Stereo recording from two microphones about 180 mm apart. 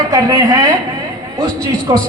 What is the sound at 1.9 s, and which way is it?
Speech, 25° right (ahead or behind).